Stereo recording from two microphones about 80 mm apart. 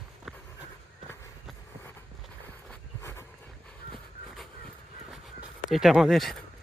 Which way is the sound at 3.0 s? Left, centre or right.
Left.